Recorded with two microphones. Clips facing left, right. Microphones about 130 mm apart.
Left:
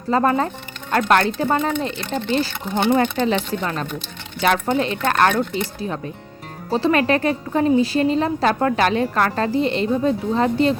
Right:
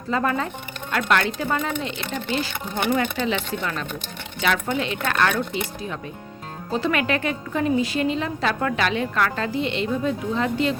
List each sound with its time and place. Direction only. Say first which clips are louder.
0.1 s a woman's voice: left 5 dB; 35° left (ahead or behind)
6.7 s a woman's voice: left 5 dB; 35° left (ahead or behind)